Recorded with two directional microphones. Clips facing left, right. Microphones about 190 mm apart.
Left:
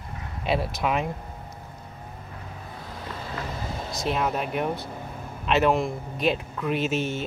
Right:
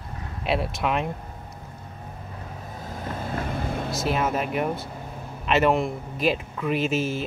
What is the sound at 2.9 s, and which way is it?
Vehicle, 50° right (ahead or behind).